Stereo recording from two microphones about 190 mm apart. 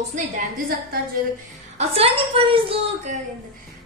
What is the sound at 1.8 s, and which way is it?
A woman's voice, 30° right (ahead or behind).